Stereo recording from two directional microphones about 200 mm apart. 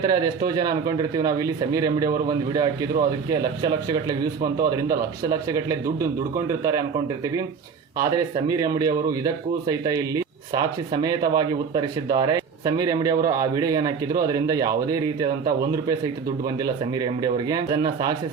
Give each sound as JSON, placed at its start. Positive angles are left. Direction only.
{"t": 0.0, "sound": "a man's voice", "side_deg": -20}